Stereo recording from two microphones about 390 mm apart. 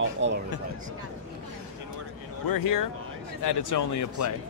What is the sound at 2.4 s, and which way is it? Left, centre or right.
Speech, left.